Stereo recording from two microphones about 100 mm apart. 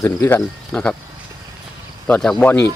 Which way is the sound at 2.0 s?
15° left (ahead or behind).